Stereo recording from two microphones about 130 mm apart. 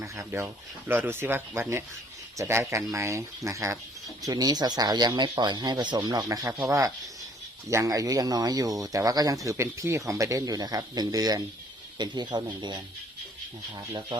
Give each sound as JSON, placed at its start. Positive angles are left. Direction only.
{"t": 0.0, "sound": "speech", "side_deg": -25}